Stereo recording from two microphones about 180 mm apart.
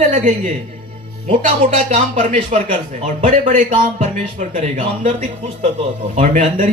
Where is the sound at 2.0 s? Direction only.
45° right (ahead or behind).